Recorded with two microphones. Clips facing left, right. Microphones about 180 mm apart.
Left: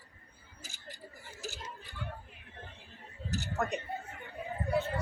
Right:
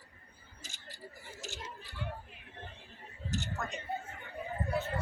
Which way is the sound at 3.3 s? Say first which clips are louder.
Left 4 dB; 60° left (ahead or behind).